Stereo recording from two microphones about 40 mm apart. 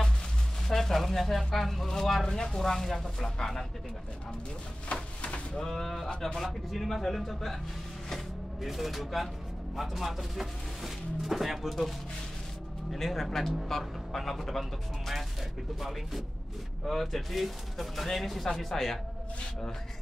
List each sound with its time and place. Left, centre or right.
0.7 s speech: centre
5.2 s speech: left
5.6 s speech: centre
8.6 s speech: centre
12.9 s speech: centre